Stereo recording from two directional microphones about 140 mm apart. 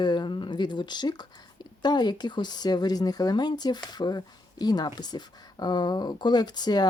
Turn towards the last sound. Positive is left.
turn(degrees=30)  # may be behind; listen again after turning